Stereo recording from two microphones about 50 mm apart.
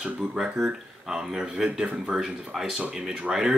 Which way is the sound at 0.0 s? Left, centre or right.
Centre.